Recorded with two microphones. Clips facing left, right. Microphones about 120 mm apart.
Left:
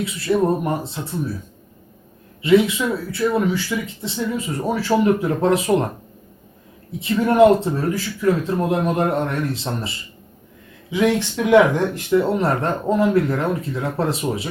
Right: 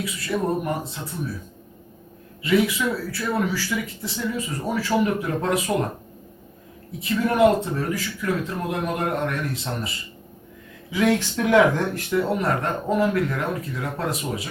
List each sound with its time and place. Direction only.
0.3 s speech: 35° left (ahead or behind)
2.4 s speech: 25° left (ahead or behind)
7.0 s speech: 25° left (ahead or behind)
10.9 s speech: 20° left (ahead or behind)